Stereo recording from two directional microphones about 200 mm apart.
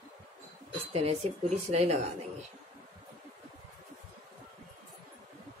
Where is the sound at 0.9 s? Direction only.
30° right (ahead or behind).